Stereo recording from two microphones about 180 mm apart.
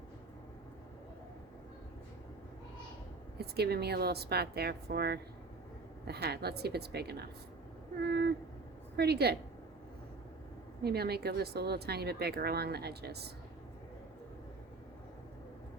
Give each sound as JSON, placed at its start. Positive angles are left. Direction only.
{"t": 3.3, "sound": "speech", "side_deg": -60}
{"t": 10.8, "sound": "speech", "side_deg": -60}